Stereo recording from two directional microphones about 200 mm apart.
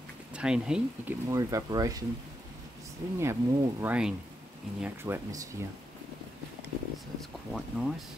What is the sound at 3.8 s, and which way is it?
Speech, 5° right (ahead or behind).